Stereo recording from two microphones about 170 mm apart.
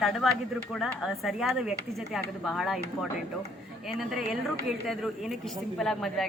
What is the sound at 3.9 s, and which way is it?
A man's voice, centre (ahead or behind).